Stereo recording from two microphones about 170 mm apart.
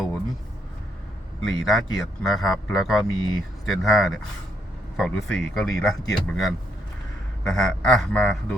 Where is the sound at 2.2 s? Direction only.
Centre (ahead or behind).